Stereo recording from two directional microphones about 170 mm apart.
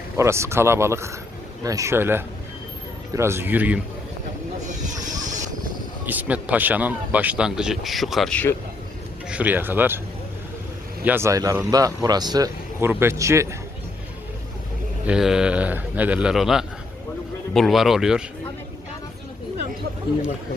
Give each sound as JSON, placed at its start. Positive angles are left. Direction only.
{"t": 0.2, "sound": "speech", "side_deg": -15}
{"t": 4.6, "sound": "a sound", "side_deg": -45}
{"t": 6.1, "sound": "speech", "side_deg": -10}
{"t": 9.3, "sound": "speech", "side_deg": -10}
{"t": 11.0, "sound": "a man's voice", "side_deg": -15}
{"t": 15.0, "sound": "speech", "side_deg": -5}